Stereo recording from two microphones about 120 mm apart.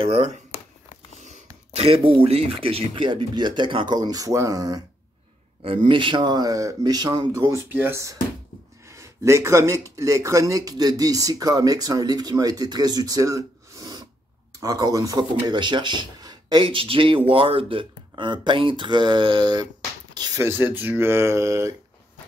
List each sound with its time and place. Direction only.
0.0 s speech: 60° right (ahead or behind); by 4.8 s 30° right (ahead or behind)
5.9 s speech: 45° right (ahead or behind)
20.4 s speech: 15° right (ahead or behind)